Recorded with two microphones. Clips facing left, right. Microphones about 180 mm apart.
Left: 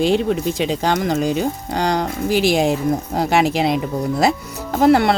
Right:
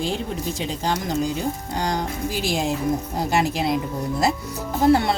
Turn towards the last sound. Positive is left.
turn(degrees=70)  # may be behind; listen again after turning